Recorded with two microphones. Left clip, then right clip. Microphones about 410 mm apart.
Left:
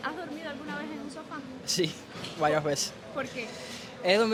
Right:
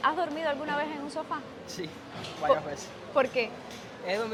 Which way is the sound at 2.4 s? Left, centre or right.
Left.